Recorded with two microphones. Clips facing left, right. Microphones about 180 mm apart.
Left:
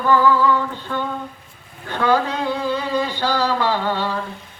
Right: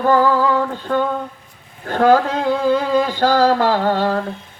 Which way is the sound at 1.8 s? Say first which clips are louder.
Right 5 dB; 45° right (ahead or behind).